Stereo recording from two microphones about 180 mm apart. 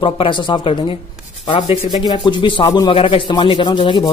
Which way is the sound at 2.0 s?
25° left (ahead or behind).